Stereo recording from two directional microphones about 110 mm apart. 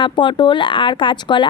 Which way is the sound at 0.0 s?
45° left (ahead or behind).